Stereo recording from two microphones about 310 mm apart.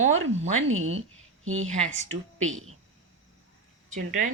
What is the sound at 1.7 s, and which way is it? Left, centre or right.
Speech, right.